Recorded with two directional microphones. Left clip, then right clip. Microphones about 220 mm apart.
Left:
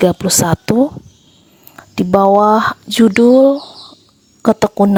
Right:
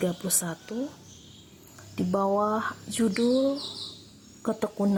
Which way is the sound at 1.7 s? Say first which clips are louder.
Left 16 dB; 40° left (ahead or behind).